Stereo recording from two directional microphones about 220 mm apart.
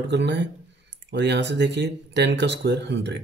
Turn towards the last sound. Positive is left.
turn(degrees=-50)  # may be behind; listen again after turning